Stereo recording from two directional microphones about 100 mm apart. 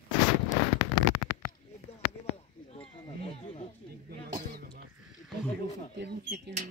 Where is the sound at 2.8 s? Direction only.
80° left.